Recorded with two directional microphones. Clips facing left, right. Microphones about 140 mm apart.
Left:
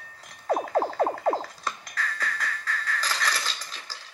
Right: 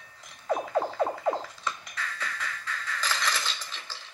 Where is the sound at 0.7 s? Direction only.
40° left (ahead or behind).